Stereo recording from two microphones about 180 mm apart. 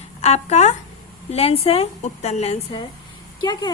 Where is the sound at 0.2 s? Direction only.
40° left (ahead or behind).